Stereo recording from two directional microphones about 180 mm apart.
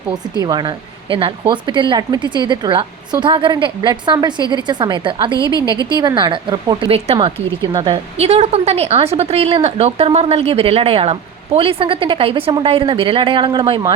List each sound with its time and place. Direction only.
0.1 s speech: 20° right (ahead or behind)
5.4 s a woman's voice: 20° left (ahead or behind)
6.0 s speech: 25° right (ahead or behind)
7.6 s speech: 20° right (ahead or behind)
8.2 s a woman's voice: 35° right (ahead or behind)